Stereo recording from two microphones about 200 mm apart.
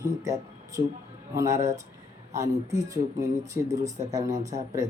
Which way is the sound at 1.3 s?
15° right (ahead or behind).